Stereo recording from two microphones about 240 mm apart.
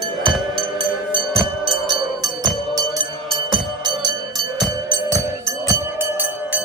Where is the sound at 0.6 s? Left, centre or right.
Right.